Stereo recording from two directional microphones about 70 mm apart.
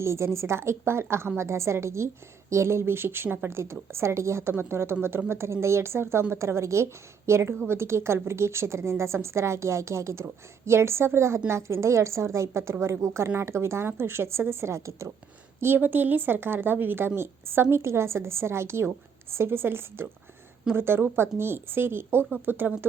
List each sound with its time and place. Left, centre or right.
0.0 s a woman's voice: right
15.6 s a woman's voice: right